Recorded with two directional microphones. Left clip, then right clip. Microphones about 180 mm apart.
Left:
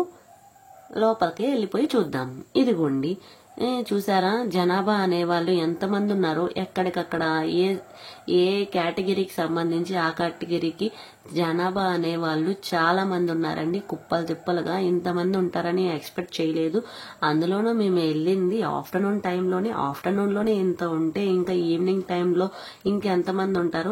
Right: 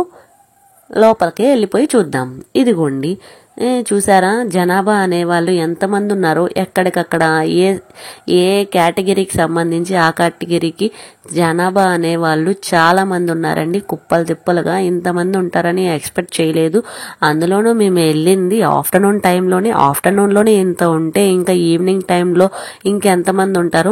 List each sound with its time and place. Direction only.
0.9 s speech: 45° right (ahead or behind)